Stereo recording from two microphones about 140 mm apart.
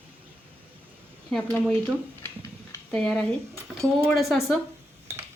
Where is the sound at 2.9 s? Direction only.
5° left (ahead or behind).